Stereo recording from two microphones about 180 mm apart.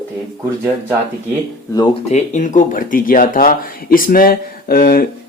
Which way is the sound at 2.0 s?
40° left (ahead or behind).